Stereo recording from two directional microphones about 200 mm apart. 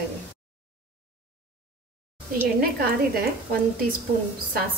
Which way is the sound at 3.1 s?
50° right (ahead or behind).